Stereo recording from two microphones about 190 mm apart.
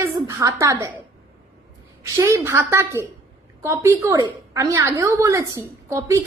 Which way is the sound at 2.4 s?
15° right (ahead or behind).